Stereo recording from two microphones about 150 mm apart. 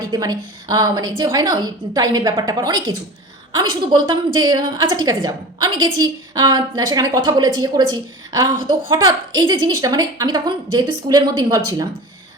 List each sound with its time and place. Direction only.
0.1 s a woman's voice: 25° right (ahead or behind)